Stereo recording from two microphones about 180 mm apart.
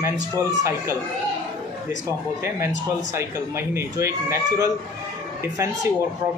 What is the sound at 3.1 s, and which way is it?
A man's voice, 15° right (ahead or behind).